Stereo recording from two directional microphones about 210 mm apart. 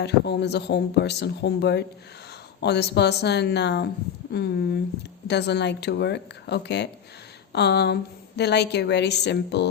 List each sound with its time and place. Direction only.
0.0 s speech: 55° left (ahead or behind)